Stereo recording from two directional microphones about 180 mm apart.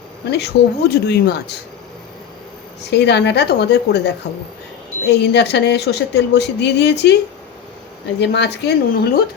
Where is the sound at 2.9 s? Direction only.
70° left (ahead or behind).